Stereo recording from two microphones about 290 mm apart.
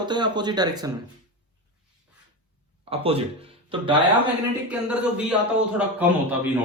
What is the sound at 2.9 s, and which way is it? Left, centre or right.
Speech, centre.